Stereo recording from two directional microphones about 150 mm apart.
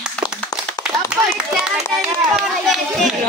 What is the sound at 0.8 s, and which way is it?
Clapping, 20° left (ahead or behind).